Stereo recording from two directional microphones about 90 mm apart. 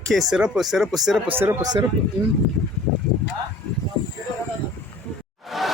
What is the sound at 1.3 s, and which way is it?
Speech, 25° right (ahead or behind).